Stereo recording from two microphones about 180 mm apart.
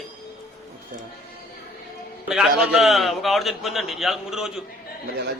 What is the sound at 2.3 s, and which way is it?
A man's voice, 5° right (ahead or behind).